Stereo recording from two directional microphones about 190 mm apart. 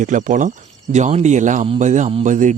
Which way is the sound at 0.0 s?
40° right (ahead or behind).